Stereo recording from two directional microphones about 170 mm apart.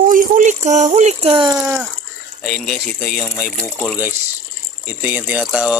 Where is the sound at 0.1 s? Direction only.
50° right (ahead or behind); by 1.5 s 30° right (ahead or behind).